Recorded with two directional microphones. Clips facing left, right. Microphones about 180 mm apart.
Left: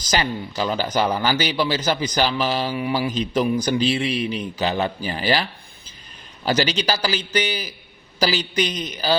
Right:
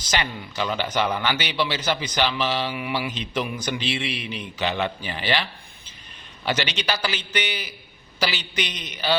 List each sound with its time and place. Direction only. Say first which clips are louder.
0.0 s a man's voice: left 4 dB; 40° left (ahead or behind)